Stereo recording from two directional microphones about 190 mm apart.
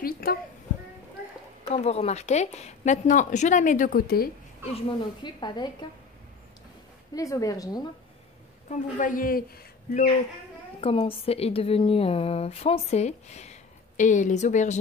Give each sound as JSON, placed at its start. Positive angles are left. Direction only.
{"t": 0.0, "sound": "a sound", "side_deg": 50}
{"t": 1.7, "sound": "a woman's voice", "side_deg": 35}
{"t": 4.7, "sound": "speech", "side_deg": 25}
{"t": 7.2, "sound": "speech", "side_deg": 15}
{"t": 8.6, "sound": "a man's voice", "side_deg": 40}
{"t": 10.8, "sound": "a woman's voice", "side_deg": 30}